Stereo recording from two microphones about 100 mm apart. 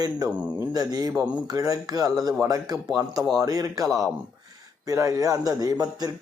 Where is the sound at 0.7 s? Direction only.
40° right (ahead or behind).